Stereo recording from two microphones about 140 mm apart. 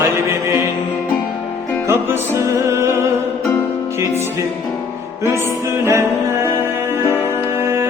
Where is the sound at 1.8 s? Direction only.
20° right (ahead or behind).